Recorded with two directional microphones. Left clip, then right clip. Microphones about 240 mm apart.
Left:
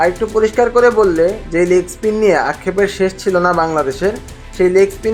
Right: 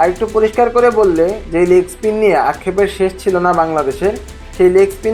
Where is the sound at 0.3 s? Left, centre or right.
Centre.